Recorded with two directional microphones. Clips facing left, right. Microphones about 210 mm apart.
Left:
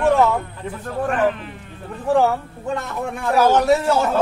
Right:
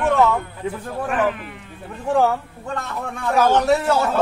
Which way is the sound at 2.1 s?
5° left (ahead or behind).